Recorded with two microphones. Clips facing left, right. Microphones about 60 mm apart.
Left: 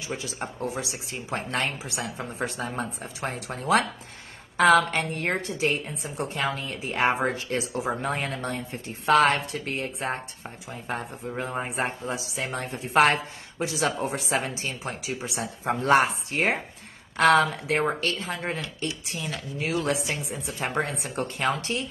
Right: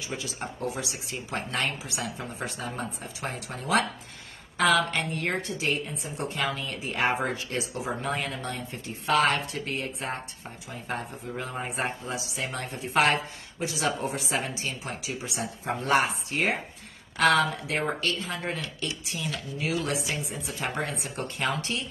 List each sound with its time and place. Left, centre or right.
0.4 s speech: left
2.4 s a man's voice: left
13.0 s a man's voice: left